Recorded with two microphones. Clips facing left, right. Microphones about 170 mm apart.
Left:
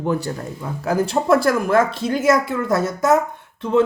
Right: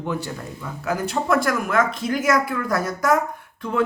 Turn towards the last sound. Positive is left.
turn(degrees=25)  # may be behind; listen again after turning